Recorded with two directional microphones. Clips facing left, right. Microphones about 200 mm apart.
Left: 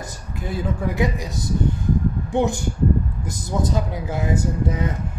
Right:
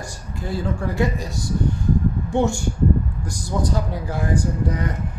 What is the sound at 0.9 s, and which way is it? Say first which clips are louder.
A man's voice: even; 15° left (ahead or behind).